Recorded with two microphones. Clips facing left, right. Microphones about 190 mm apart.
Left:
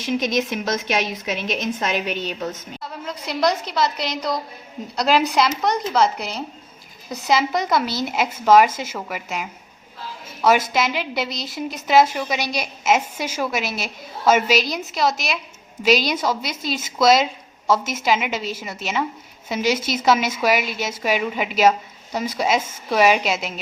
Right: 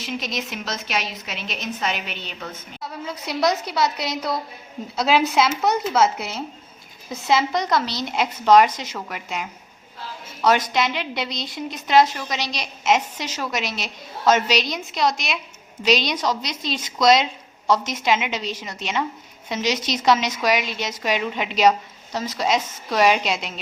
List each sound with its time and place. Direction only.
0.2 s a woman's voice: 50° left (ahead or behind)
3.1 s a woman's voice: 10° right (ahead or behind)